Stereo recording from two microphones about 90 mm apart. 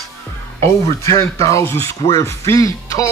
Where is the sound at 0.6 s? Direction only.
30° left (ahead or behind).